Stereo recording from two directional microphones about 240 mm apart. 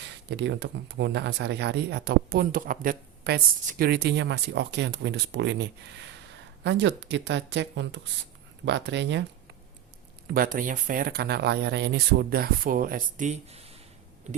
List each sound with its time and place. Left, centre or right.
0.0 s speech: right
10.2 s speech: right